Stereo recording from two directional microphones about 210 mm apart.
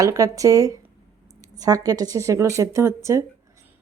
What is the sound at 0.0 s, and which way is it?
Speech, 15° right (ahead or behind).